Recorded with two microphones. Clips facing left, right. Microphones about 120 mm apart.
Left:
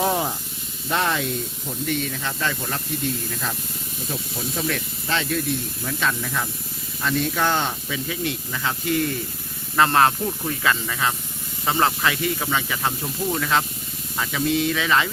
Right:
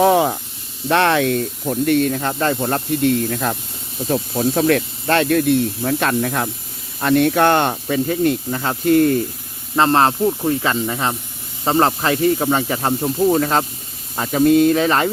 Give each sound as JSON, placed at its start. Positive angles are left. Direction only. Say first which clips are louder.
{"t": 0.0, "sound": "speech", "louder": "right 9 dB", "side_deg": -90}
{"t": 0.9, "sound": "speech", "louder": "right 8 dB", "side_deg": -80}
{"t": 9.7, "sound": "speech", "louder": "right 3 dB", "side_deg": -30}